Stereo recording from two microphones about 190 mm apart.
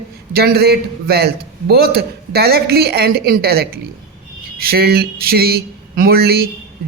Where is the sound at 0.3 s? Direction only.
55° right (ahead or behind).